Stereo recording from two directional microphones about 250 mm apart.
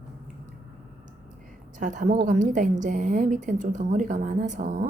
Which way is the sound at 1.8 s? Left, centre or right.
Right.